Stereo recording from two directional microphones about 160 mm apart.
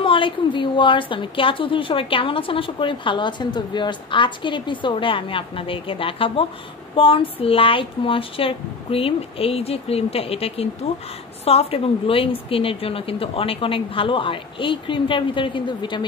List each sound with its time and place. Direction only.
0.0 s a woman's voice: 30° left (ahead or behind)